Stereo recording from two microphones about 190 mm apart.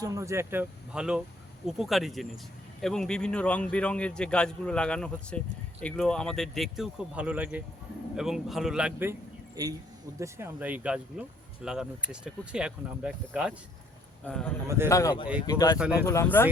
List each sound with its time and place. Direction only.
0.0 s speech: 15° right (ahead or behind)
14.3 s speech: 5° left (ahead or behind)
14.8 s speech: 15° left (ahead or behind)